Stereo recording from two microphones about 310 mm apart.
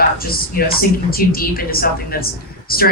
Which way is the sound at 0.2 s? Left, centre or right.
Left.